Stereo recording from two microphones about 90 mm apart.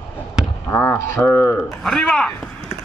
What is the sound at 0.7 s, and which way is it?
Speech, 25° left (ahead or behind).